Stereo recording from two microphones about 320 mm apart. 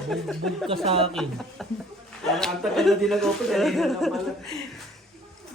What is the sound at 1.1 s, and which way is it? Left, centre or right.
Speech, centre.